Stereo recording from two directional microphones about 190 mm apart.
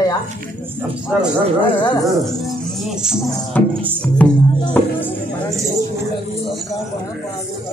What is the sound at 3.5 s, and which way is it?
Music, 10° left (ahead or behind).